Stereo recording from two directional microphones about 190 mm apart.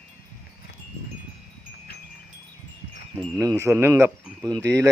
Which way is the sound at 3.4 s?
15° right (ahead or behind).